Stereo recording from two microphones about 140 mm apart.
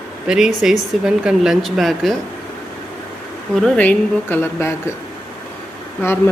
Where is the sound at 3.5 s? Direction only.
5° left (ahead or behind).